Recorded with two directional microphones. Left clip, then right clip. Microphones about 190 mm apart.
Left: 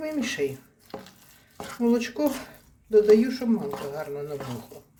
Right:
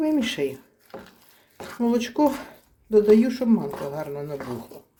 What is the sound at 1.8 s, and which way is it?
Speech, 40° right (ahead or behind).